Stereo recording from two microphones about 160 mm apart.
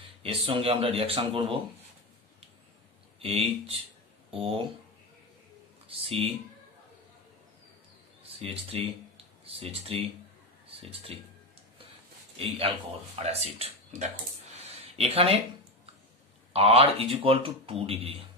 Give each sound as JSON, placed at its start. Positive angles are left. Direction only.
{"t": 0.2, "sound": "speech", "side_deg": -35}
{"t": 3.2, "sound": "speech", "side_deg": -40}
{"t": 5.9, "sound": "speech", "side_deg": -35}
{"t": 8.4, "sound": "speech", "side_deg": -35}
{"t": 12.4, "sound": "speech", "side_deg": -35}